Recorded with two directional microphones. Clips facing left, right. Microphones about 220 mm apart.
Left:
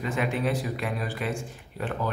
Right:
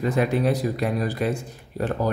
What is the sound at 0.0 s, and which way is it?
Speech, 40° right (ahead or behind).